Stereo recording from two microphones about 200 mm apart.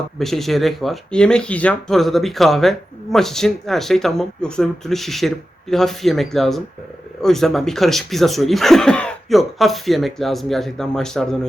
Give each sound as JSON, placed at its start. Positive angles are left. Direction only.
{"t": 0.2, "sound": "speech", "side_deg": 0}